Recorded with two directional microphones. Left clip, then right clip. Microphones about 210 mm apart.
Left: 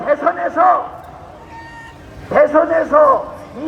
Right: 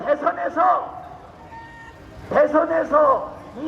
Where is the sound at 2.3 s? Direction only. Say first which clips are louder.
Left 5 dB; 20° right (ahead or behind).